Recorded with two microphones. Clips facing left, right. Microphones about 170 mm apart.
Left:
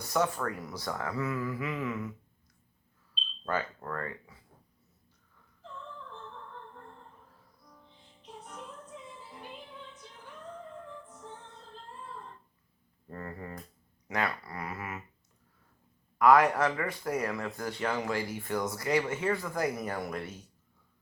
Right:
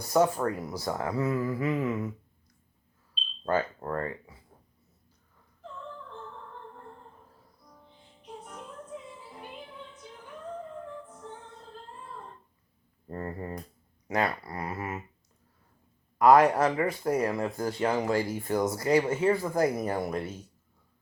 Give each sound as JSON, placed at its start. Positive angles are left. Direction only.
{"t": 0.1, "sound": "speech", "side_deg": -35}
{"t": 3.4, "sound": "speech", "side_deg": -35}
{"t": 13.1, "sound": "speech", "side_deg": -30}
{"t": 16.1, "sound": "speech", "side_deg": -30}